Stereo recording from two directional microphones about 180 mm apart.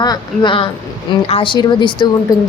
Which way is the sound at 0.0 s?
25° left (ahead or behind).